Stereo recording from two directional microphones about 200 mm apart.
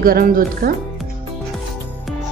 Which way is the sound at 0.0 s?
45° right (ahead or behind).